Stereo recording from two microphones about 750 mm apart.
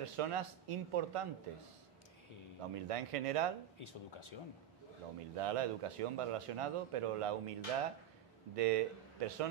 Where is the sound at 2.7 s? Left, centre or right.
Right.